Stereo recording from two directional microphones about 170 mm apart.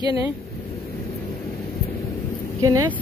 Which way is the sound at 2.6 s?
20° right (ahead or behind).